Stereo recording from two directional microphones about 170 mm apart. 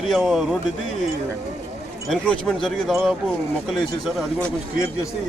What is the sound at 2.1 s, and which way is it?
Speech, 5° left (ahead or behind).